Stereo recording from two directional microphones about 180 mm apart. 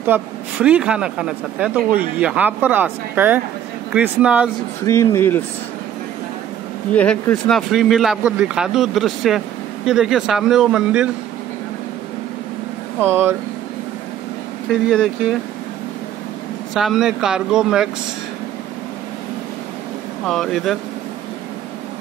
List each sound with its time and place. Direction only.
0.0 s speech: 10° right (ahead or behind)
4.8 s speech: 15° left (ahead or behind)
6.9 s speech: 10° left (ahead or behind)
13.0 s speech: 15° right (ahead or behind)
14.9 s speech: 5° left (ahead or behind)
16.7 s speech: centre (ahead or behind)
20.2 s speech: centre (ahead or behind)